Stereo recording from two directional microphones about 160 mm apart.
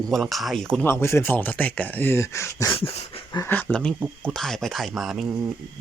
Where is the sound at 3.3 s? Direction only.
15° left (ahead or behind).